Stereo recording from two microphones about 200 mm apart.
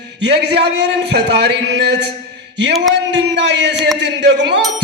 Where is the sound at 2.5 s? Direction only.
60° right (ahead or behind).